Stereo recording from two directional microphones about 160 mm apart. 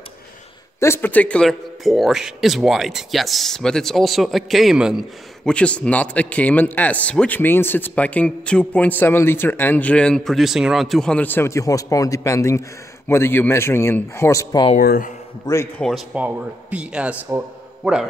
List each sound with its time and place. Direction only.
0.7 s speech: 15° left (ahead or behind)
14.8 s speech: 65° left (ahead or behind)
15.4 s speech: 20° left (ahead or behind)
15.8 s a man's voice: 5° right (ahead or behind)